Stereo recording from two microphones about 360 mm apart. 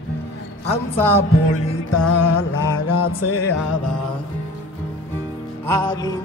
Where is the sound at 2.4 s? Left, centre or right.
Left.